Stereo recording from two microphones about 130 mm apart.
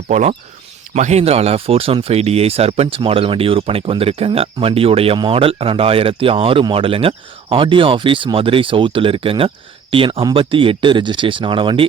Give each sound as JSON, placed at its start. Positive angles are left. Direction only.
{"t": 0.1, "sound": "speech", "side_deg": -65}